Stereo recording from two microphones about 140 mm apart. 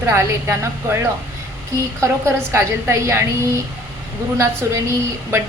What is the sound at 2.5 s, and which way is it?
Speech, 20° right (ahead or behind).